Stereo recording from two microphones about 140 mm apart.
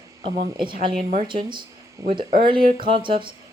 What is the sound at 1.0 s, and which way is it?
Speech, 55° right (ahead or behind).